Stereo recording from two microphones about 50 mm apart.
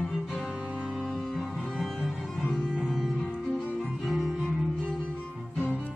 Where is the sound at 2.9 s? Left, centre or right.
Centre.